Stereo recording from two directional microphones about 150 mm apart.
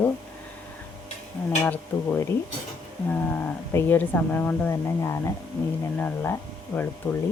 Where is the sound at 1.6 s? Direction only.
15° left (ahead or behind).